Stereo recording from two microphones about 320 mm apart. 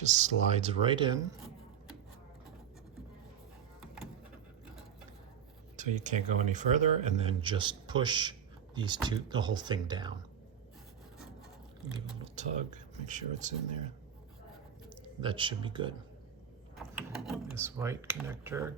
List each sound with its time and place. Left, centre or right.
0.0 s speech: right
5.7 s speech: right
11.9 s speech: centre
15.2 s speech: centre
16.7 s speech: centre